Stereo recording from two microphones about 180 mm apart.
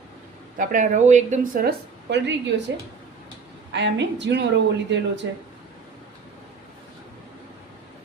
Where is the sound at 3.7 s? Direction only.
75° right (ahead or behind).